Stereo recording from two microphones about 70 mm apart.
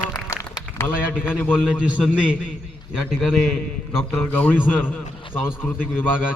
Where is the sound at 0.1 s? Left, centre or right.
Left.